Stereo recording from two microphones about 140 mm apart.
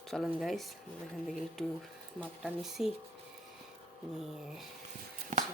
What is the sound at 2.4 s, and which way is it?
Speech, 5° right (ahead or behind).